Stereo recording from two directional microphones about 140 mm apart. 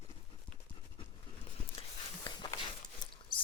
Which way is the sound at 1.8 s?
40° left (ahead or behind).